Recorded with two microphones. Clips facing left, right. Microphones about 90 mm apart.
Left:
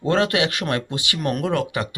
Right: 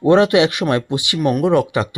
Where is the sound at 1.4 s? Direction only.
20° right (ahead or behind).